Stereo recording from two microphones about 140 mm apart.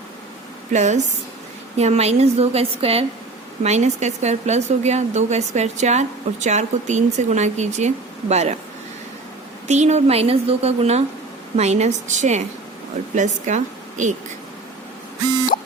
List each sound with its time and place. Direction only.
0.7 s a woman's voice: 55° right (ahead or behind)
9.6 s a woman's voice: 55° right (ahead or behind)